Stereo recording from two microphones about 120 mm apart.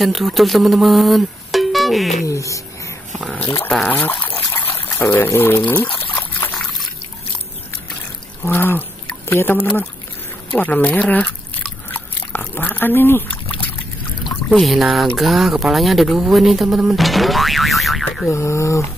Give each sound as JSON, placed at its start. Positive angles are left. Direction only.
{"t": 0.0, "sound": "music", "side_deg": 0}
{"t": 2.2, "sound": "a sound", "side_deg": 25}
{"t": 3.1, "sound": "a sound", "side_deg": 0}
{"t": 3.8, "sound": "speech", "side_deg": 15}
{"t": 8.5, "sound": "speech", "side_deg": 15}
{"t": 9.6, "sound": "speech", "side_deg": 10}
{"t": 11.9, "sound": "a sound", "side_deg": 15}
{"t": 14.2, "sound": "speech", "side_deg": 0}
{"t": 18.3, "sound": "speech", "side_deg": 25}